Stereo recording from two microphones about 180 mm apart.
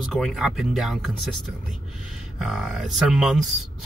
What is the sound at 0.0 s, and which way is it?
Speech, centre (ahead or behind).